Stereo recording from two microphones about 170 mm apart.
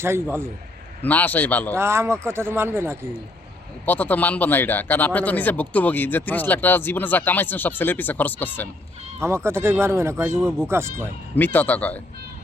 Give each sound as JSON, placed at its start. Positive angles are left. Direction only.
{"t": 0.0, "sound": "speech", "side_deg": -15}
{"t": 1.0, "sound": "speech", "side_deg": 10}
{"t": 1.7, "sound": "speech", "side_deg": -15}
{"t": 3.8, "sound": "speech", "side_deg": 10}
{"t": 9.2, "sound": "speech", "side_deg": -15}
{"t": 10.3, "sound": "speech", "side_deg": 5}
{"t": 10.7, "sound": "speech", "side_deg": -15}
{"t": 11.3, "sound": "speech", "side_deg": 10}